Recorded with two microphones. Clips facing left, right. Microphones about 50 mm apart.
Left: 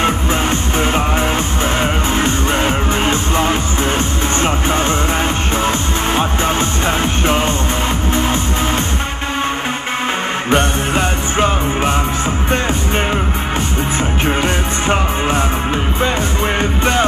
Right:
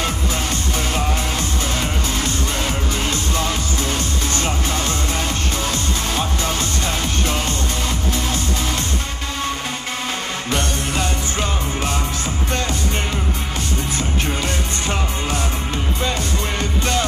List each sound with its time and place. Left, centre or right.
0.0 s music: left
10.5 s music: left
14.2 s music: left
16.5 s music: left